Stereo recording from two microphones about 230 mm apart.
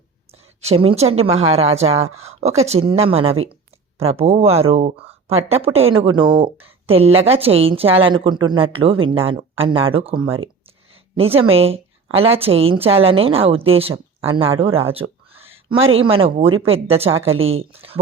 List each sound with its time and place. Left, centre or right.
0.6 s a woman's voice: right
11.2 s a woman's voice: right
14.6 s a sound: right
16.1 s a woman's voice: right